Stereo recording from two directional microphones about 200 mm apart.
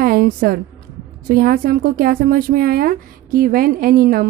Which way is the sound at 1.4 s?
45° right (ahead or behind).